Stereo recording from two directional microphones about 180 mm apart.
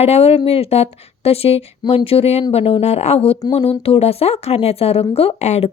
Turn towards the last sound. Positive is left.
turn(degrees=35)  # may be behind; listen again after turning